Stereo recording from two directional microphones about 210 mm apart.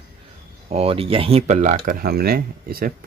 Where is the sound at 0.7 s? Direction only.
30° right (ahead or behind).